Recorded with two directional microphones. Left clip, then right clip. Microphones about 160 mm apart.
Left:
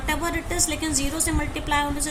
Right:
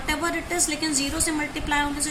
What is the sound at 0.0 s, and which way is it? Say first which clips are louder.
A woman's voice: even; 30° left (ahead or behind).